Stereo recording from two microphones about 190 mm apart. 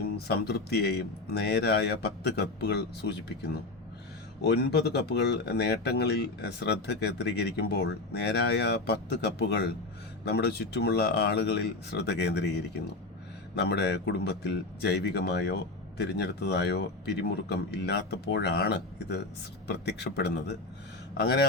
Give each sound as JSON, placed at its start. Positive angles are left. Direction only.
{"t": 0.3, "sound": "speech", "side_deg": 60}